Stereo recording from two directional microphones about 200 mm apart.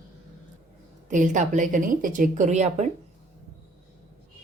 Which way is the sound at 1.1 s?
40° right (ahead or behind).